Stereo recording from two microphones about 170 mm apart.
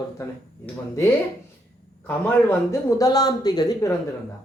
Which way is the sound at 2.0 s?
15° left (ahead or behind).